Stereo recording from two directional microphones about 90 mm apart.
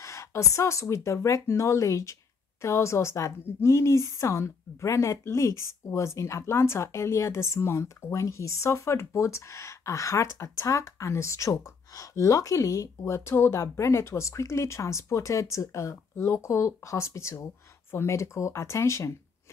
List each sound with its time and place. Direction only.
0.0 s a woman's voice: 35° left (ahead or behind)